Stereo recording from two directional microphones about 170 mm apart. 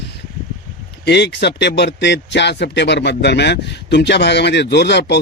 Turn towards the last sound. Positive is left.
turn(degrees=90)